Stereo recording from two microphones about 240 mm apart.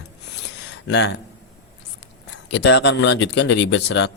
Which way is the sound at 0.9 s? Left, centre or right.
Left.